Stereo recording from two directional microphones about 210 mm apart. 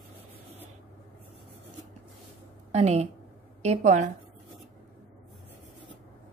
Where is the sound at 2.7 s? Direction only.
30° right (ahead or behind).